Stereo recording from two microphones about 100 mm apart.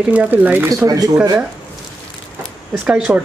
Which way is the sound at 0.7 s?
35° right (ahead or behind).